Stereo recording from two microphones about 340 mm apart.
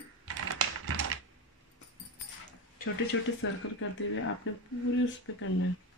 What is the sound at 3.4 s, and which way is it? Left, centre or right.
Speech, left.